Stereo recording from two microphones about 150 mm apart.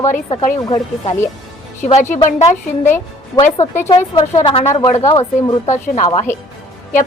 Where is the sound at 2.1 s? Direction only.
50° left (ahead or behind).